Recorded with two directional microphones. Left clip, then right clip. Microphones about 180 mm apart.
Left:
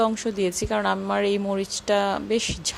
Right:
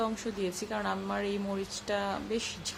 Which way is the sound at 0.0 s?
40° left (ahead or behind).